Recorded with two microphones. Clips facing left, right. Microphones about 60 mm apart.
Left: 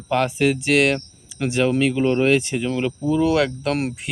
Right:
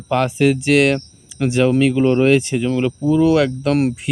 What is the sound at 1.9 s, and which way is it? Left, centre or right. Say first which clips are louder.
Speech: right 4 dB; centre.